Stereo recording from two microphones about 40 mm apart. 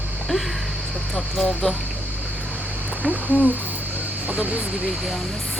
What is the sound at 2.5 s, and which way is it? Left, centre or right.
Insect, right.